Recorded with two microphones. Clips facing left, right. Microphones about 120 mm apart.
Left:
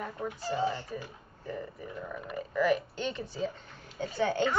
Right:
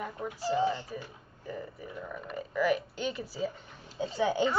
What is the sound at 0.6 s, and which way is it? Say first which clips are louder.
Speech: right 2 dB; 15° right (ahead or behind).